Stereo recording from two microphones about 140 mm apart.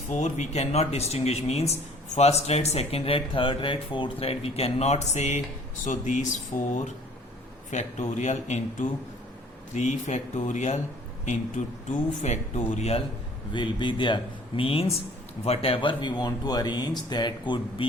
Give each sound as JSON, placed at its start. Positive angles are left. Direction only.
{"t": 0.1, "sound": "speech", "side_deg": 55}
{"t": 13.5, "sound": "speech", "side_deg": 35}